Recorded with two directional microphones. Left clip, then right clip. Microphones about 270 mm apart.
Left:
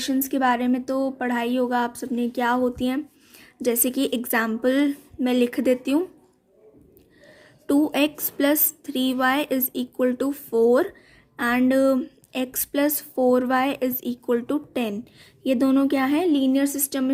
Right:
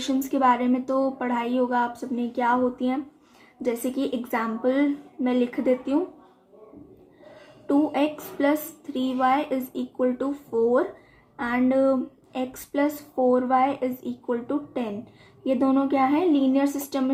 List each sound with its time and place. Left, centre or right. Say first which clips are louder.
0.0 s speech: even; left
7.7 s speech: left 2 dB; left